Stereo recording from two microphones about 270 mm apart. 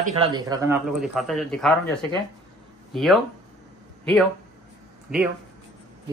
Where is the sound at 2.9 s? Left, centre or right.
Centre.